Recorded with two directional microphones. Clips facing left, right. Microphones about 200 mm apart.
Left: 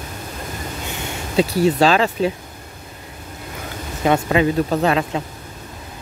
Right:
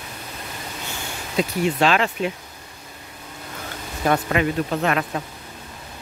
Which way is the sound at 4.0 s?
20° left (ahead or behind).